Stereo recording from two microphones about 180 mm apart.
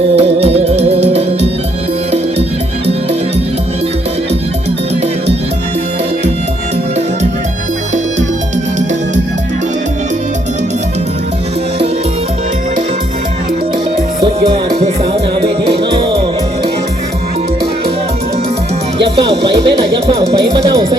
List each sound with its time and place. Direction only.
0.2 s music: 35° right (ahead or behind)
14.4 s music: 35° right (ahead or behind)
19.4 s speech: 25° right (ahead or behind)